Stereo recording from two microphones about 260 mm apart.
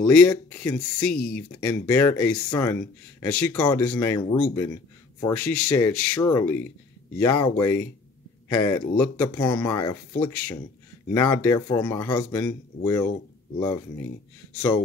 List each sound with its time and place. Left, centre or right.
0.0 s speech: centre
1.1 s speech: left
1.6 s speech: centre
3.5 s speech: centre